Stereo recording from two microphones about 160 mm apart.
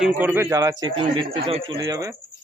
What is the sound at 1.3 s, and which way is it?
Speech, 40° right (ahead or behind).